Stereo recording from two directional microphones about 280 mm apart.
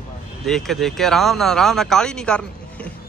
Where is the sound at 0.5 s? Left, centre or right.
Centre.